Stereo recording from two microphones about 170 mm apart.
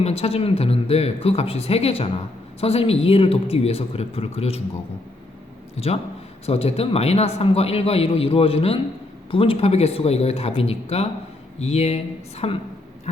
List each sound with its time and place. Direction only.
0.0 s speech: 35° left (ahead or behind)
6.4 s speech: 35° left (ahead or behind)